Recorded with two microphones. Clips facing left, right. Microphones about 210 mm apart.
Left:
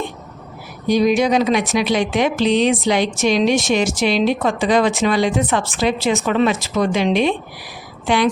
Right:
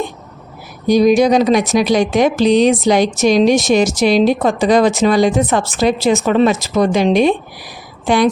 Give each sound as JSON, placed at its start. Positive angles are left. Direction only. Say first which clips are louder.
{"t": 0.9, "sound": "a woman's voice", "louder": "right 5 dB", "side_deg": -40}